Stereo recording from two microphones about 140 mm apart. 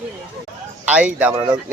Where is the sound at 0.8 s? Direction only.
10° right (ahead or behind).